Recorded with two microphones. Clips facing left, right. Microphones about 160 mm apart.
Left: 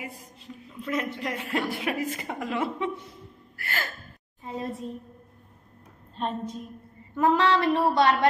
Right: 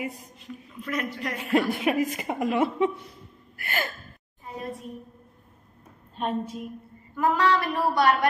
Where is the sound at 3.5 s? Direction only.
15° right (ahead or behind).